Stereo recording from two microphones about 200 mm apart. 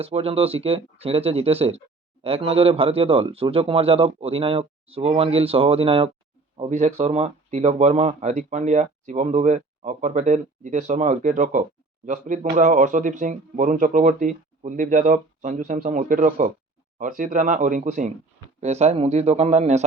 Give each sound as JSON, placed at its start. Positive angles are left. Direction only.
{"t": 0.0, "sound": "speech", "side_deg": -30}